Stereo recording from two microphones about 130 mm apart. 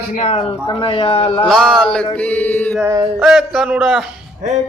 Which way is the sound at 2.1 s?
10° left (ahead or behind).